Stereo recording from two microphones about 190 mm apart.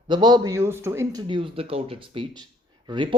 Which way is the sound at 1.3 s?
30° right (ahead or behind).